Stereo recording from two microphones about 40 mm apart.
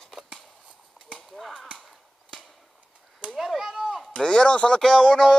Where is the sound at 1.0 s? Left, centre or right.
Right.